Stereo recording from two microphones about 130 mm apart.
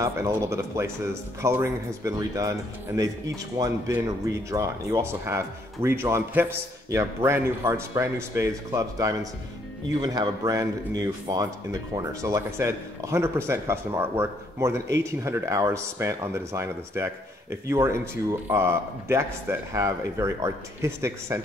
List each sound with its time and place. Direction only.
0.0 s speech: 20° right (ahead or behind)
3.5 s speech: 25° right (ahead or behind)